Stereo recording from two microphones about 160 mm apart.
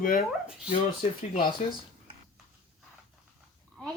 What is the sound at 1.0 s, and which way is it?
Speech, 35° left (ahead or behind).